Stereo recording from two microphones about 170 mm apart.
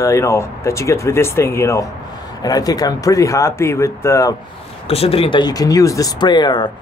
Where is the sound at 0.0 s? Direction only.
15° left (ahead or behind).